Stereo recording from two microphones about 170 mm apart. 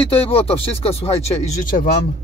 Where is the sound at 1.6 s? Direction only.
55° left (ahead or behind).